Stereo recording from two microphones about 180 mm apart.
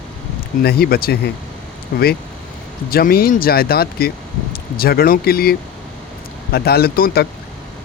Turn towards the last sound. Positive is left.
turn(degrees=55)  # may be behind; listen again after turning